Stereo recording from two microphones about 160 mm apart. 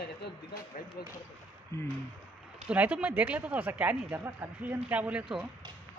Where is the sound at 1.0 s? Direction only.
70° left (ahead or behind).